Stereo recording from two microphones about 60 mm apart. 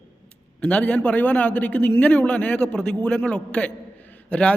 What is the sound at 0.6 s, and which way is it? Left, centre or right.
A man's voice, centre.